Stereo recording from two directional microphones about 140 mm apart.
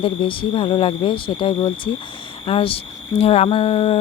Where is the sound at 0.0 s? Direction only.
40° left (ahead or behind).